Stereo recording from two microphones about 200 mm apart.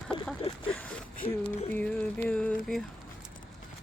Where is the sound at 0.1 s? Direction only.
25° left (ahead or behind).